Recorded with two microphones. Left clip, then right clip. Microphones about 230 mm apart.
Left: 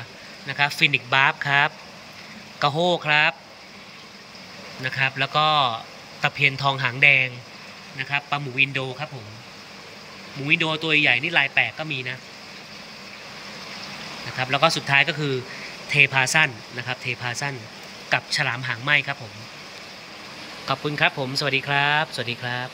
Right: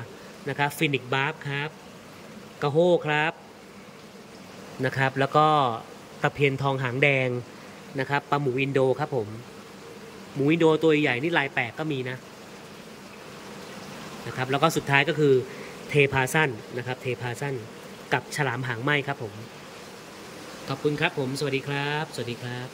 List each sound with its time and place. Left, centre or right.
0.5 s speech: centre
2.9 s speech: centre
4.8 s speech: centre
10.4 s speech: centre
14.4 s speech: centre
20.6 s speech: centre